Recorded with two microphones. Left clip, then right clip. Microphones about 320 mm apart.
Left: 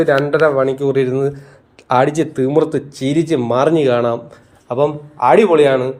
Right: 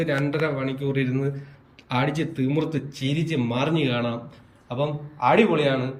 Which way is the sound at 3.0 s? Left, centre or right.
Left.